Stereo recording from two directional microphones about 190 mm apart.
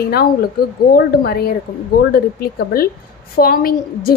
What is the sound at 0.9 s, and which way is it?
A woman's voice, 55° left (ahead or behind).